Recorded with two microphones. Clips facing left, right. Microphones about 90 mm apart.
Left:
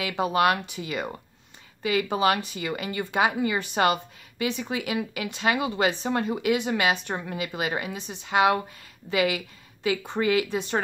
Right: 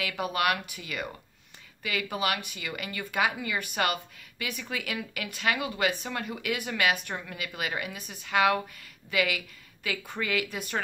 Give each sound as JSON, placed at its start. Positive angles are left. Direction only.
{"t": 0.0, "sound": "speech", "side_deg": 25}